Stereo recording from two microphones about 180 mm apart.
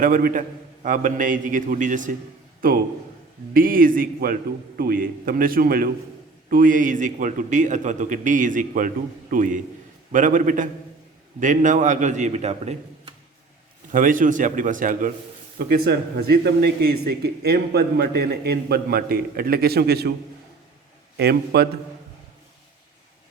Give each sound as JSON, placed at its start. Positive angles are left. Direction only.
{"t": 0.0, "sound": "a man's voice", "side_deg": -50}
{"t": 13.9, "sound": "a man's voice", "side_deg": -50}
{"t": 15.5, "sound": "a man's voice", "side_deg": -60}
{"t": 21.2, "sound": "a man's voice", "side_deg": -60}